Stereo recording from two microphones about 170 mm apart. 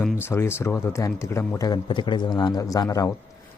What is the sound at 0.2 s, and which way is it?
A man's voice, 15° left (ahead or behind).